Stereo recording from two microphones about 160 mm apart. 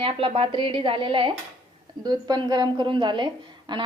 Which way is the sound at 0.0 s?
35° right (ahead or behind).